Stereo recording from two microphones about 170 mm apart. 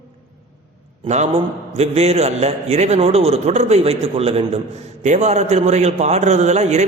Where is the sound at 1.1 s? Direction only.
40° right (ahead or behind).